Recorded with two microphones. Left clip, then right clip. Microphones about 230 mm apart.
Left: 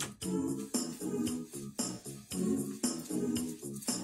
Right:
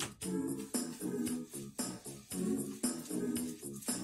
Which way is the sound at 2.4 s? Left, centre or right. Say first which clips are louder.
Left 3 dB; left.